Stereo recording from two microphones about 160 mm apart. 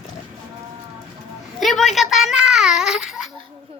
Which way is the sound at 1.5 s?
Centre (ahead or behind).